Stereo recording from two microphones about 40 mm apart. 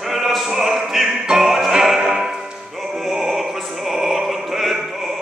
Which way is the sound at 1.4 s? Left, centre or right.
Centre.